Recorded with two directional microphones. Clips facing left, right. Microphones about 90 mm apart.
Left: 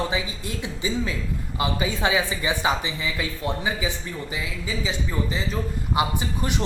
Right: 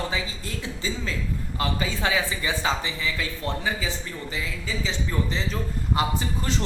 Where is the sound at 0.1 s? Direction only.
15° left (ahead or behind).